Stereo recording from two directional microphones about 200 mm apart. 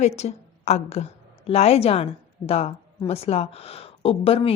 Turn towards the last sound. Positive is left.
turn(degrees=30)  # may be behind; listen again after turning